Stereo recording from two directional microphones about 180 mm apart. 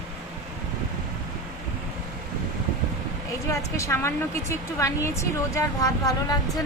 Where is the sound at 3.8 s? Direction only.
15° left (ahead or behind).